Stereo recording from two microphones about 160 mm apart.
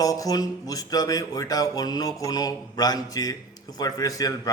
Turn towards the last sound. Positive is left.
turn(degrees=25)  # may be behind; listen again after turning